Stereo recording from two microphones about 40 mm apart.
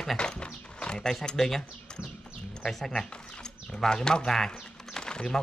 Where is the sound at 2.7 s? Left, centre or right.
Centre.